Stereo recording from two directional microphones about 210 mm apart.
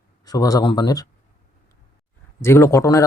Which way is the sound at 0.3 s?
15° left (ahead or behind).